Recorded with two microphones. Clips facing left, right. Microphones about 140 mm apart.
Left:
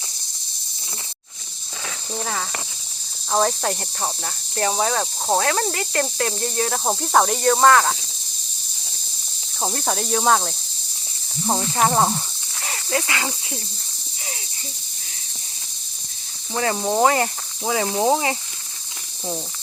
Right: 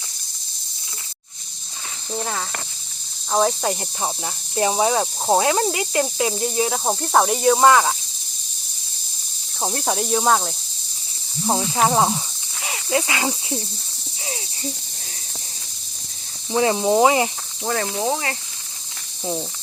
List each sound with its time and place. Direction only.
2.1 s cricket: centre (ahead or behind)
4.5 s speech: 15° right (ahead or behind)
9.6 s cricket: centre (ahead or behind)
12.6 s speech: 15° right (ahead or behind)
16.5 s speech: 15° right (ahead or behind)
17.6 s cricket: 5° left (ahead or behind)
17.8 s cricket: 25° left (ahead or behind)